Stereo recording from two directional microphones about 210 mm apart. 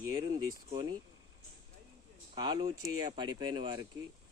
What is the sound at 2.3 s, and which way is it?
Speech, 20° right (ahead or behind).